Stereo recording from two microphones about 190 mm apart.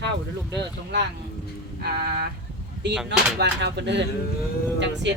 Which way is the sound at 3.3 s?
65° right (ahead or behind).